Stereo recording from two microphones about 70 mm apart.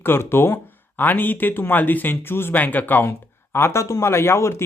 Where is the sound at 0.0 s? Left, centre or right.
Left.